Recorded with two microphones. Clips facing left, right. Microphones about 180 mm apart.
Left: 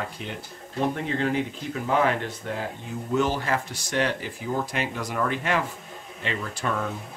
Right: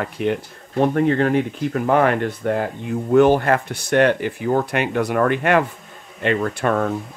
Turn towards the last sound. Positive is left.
turn(degrees=-60)  # may be behind; listen again after turning